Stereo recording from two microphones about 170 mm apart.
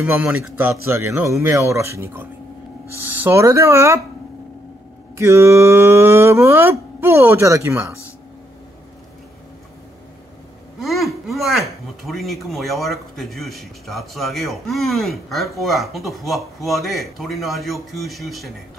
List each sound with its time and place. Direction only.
0.3 s speech: 10° right (ahead or behind)
5.1 s speech: 15° right (ahead or behind)
10.8 s speech: centre (ahead or behind)